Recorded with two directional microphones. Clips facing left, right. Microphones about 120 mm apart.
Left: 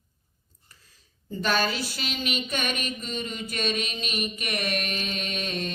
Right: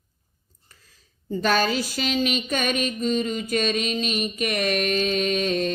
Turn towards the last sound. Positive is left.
turn(degrees=-40)  # may be behind; listen again after turning